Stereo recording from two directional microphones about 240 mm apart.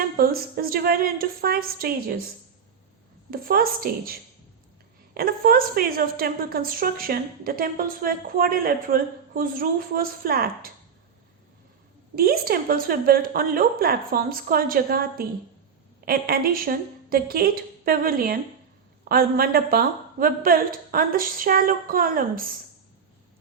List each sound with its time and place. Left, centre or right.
0.2 s a woman's voice: right
3.2 s a woman's voice: right
12.1 s a woman's voice: right